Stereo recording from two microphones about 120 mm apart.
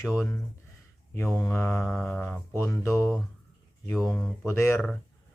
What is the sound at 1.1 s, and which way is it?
Speech, 20° left (ahead or behind).